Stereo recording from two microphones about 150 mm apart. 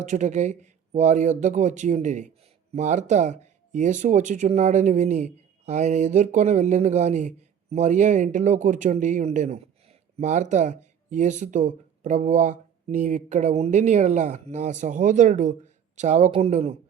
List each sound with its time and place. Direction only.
0.0 s speech: 55° right (ahead or behind)